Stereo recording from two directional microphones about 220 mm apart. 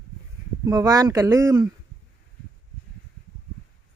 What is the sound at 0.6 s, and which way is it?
Speech, 15° right (ahead or behind).